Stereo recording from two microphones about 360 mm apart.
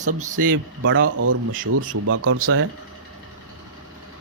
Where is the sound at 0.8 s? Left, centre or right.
Right.